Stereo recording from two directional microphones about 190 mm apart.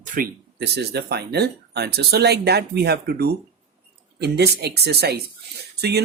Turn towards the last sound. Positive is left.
turn(degrees=-60)  # may be behind; listen again after turning